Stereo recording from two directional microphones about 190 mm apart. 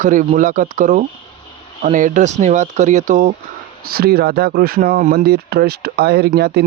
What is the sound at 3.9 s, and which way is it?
Speech, 55° right (ahead or behind).